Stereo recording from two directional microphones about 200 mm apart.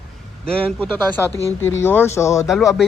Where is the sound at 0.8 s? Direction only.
10° left (ahead or behind).